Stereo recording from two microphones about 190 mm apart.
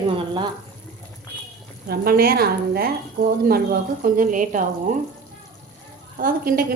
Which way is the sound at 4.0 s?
45° right (ahead or behind).